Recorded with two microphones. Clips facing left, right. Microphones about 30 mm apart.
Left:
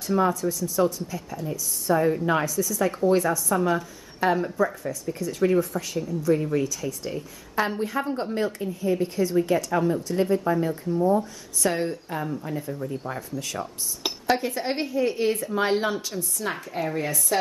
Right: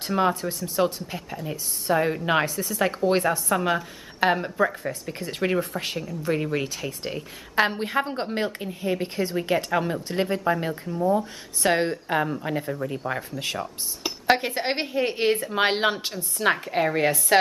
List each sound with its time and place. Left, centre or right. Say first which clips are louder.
0.0 s speech: even; right